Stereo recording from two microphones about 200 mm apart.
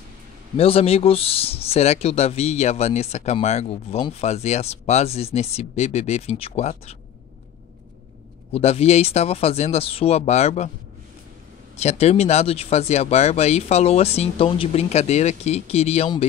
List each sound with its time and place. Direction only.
0.6 s speech: 30° left (ahead or behind)
8.5 s speech: 30° left (ahead or behind)
11.7 s speech: 35° left (ahead or behind)